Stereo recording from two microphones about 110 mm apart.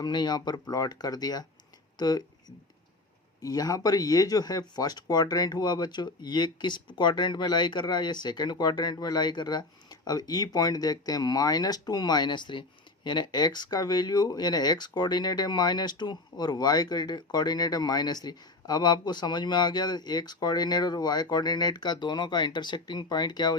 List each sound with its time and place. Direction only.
0.0 s speech: 40° left (ahead or behind)
3.4 s speech: 35° left (ahead or behind)